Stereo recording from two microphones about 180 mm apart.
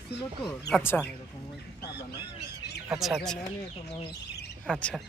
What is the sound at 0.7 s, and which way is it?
Speech, 10° left (ahead or behind).